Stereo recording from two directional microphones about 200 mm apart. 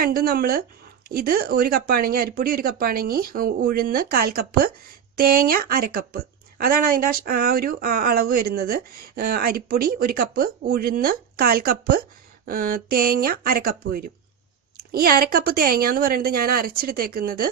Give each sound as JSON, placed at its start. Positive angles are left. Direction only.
{"t": 0.0, "sound": "a woman's voice", "side_deg": -45}